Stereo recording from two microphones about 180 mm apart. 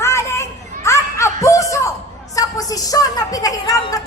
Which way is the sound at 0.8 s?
15° left (ahead or behind).